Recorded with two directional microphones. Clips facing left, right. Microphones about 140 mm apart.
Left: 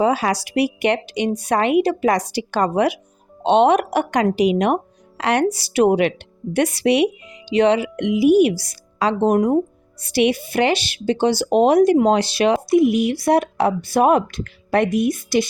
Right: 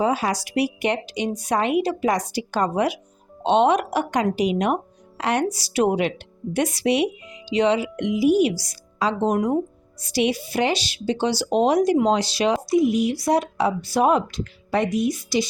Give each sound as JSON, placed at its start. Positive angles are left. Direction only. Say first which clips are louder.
{"t": 0.0, "sound": "speech", "louder": "left 4 dB", "side_deg": 75}